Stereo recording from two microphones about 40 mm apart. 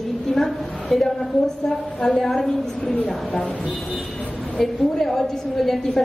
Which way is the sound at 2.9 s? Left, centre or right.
Centre.